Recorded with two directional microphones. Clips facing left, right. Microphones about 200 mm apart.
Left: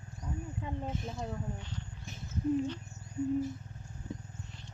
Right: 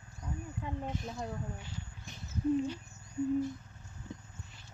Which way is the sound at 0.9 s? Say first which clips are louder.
Left 1 dB; centre (ahead or behind).